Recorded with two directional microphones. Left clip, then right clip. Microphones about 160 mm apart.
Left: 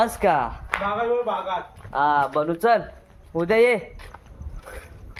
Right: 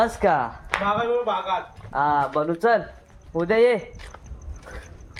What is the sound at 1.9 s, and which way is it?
Speech, 10° left (ahead or behind).